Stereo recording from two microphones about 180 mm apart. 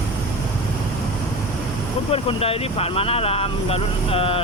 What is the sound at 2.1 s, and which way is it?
Speech, 30° left (ahead or behind).